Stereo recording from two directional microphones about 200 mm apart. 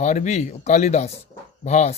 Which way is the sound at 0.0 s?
35° left (ahead or behind).